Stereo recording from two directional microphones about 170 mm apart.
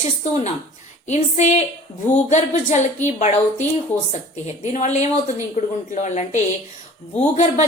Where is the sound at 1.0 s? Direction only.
45° left (ahead or behind).